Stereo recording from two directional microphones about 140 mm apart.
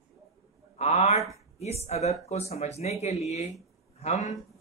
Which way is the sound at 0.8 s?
50° left (ahead or behind).